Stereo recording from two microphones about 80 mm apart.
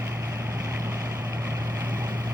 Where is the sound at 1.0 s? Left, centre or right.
Right.